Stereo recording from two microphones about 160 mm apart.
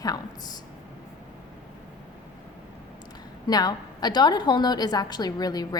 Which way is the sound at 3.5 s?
25° left (ahead or behind).